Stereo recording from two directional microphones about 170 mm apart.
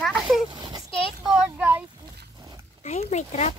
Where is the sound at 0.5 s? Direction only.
25° right (ahead or behind).